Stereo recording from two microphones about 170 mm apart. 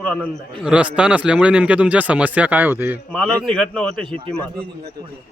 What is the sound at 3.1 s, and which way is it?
Speech, 5° left (ahead or behind).